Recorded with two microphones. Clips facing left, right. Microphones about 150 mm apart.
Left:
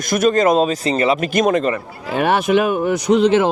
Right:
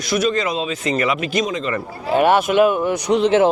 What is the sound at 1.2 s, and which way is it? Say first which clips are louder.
Speech: left 5 dB; 50° left (ahead or behind).